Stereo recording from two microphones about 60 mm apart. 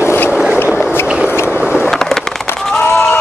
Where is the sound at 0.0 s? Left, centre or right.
Left.